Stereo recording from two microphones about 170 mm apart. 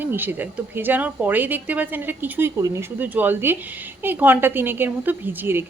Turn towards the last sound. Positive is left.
turn(degrees=-10)  # may be behind; listen again after turning